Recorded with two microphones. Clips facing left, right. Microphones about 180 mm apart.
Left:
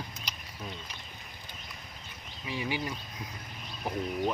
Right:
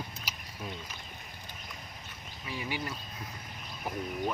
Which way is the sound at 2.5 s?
15° left (ahead or behind).